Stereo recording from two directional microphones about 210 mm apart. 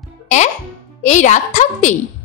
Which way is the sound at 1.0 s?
35° left (ahead or behind).